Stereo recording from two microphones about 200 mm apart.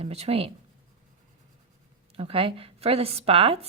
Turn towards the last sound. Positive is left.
turn(degrees=-30)  # may be behind; listen again after turning